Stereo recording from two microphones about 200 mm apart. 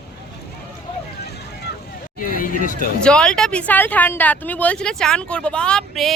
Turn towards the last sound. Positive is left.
turn(degrees=0)  # may be behind; listen again after turning